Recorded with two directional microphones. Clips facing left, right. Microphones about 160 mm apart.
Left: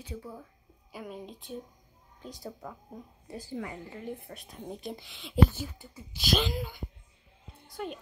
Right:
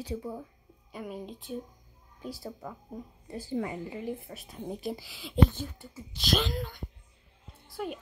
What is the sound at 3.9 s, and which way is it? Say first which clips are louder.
A woman's voice: right 3 dB; 5° right (ahead or behind).